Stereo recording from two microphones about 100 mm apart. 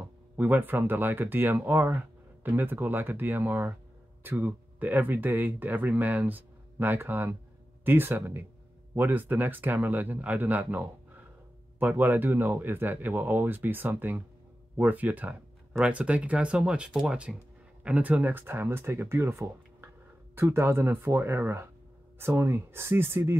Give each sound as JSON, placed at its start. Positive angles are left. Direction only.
{"t": 0.4, "sound": "speech", "side_deg": -20}